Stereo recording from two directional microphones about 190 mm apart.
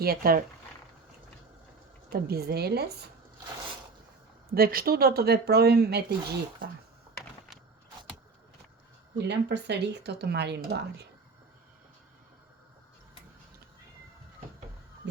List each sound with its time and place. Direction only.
0.0 s speech: 50° right (ahead or behind)
2.0 s speech: 55° right (ahead or behind)
4.5 s speech: 50° right (ahead or behind)
9.1 s speech: 65° right (ahead or behind)